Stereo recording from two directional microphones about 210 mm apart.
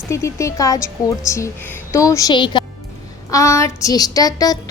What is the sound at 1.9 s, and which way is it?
Speech, 15° left (ahead or behind).